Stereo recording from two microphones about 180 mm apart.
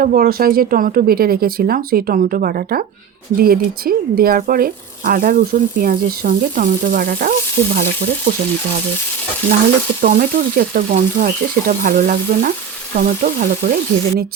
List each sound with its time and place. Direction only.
0.0 s speech: 55° right (ahead or behind)
10.0 s speech: 50° right (ahead or behind)